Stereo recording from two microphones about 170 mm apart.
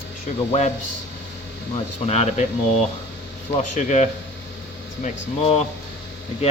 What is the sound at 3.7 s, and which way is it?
Speech, 45° left (ahead or behind).